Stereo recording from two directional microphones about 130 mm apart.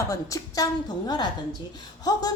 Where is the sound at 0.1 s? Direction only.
25° left (ahead or behind).